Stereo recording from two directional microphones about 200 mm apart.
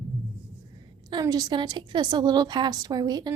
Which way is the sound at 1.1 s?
20° right (ahead or behind).